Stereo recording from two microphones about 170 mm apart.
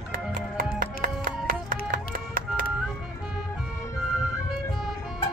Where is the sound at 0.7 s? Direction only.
55° right (ahead or behind).